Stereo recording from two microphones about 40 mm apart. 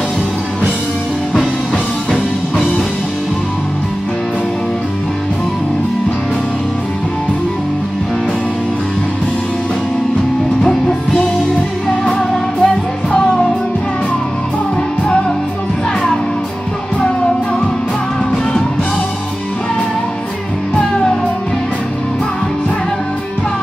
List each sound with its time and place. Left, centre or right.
12.1 s music: left